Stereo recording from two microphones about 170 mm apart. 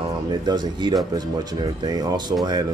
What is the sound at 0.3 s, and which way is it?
Speech, 25° right (ahead or behind).